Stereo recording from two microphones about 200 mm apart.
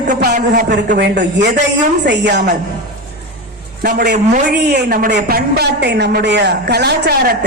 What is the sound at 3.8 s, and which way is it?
A man's voice, 50° right (ahead or behind).